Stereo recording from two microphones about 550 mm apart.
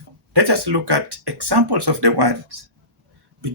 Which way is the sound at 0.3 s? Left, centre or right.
Right.